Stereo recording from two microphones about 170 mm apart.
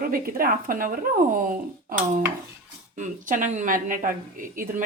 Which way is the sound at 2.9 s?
50° right (ahead or behind).